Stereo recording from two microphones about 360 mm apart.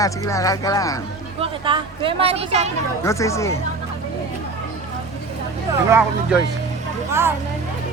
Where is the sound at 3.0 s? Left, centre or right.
Centre.